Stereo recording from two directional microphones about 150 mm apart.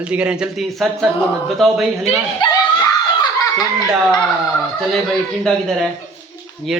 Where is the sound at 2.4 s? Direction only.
35° left (ahead or behind).